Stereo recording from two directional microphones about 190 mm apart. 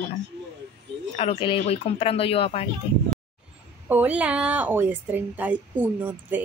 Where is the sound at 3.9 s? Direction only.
10° right (ahead or behind).